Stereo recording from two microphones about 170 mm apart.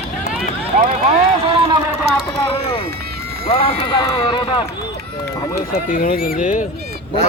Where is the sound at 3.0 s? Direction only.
65° right (ahead or behind).